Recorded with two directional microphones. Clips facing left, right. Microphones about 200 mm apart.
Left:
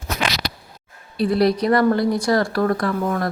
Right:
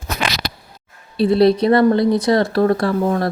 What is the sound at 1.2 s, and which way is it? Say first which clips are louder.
Speech: right 4 dB; 25° right (ahead or behind).